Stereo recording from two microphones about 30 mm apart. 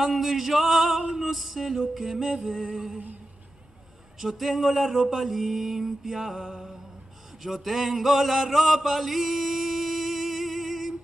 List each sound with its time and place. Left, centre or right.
0.0 s male singing: centre
1.1 s music: centre
2.2 s music: right
4.4 s a sound: centre
5.1 s music: centre
7.4 s chant: centre